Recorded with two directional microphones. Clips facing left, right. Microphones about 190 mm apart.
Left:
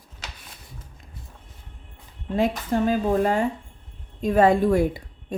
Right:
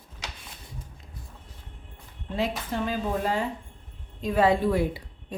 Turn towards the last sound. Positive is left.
turn(degrees=45)  # may be behind; listen again after turning